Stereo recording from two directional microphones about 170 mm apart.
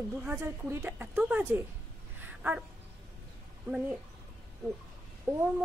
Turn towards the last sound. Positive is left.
turn(degrees=-15)  # may be behind; listen again after turning